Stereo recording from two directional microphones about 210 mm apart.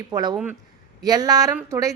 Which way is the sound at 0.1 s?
20° right (ahead or behind).